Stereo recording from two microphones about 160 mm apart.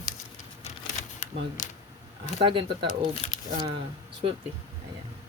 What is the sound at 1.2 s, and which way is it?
Speech, 50° left (ahead or behind).